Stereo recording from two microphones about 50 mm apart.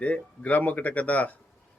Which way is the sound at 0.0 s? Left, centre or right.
Left.